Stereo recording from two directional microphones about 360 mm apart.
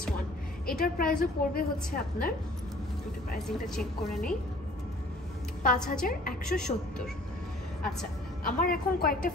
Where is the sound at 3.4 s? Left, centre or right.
Centre.